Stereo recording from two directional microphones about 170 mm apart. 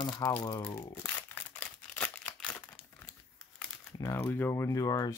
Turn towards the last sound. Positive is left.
turn(degrees=20)  # may be behind; listen again after turning